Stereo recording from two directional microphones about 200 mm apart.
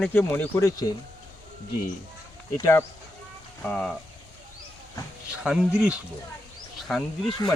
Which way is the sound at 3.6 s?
5° left (ahead or behind).